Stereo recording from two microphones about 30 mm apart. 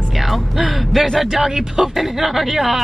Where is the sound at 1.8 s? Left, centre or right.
Centre.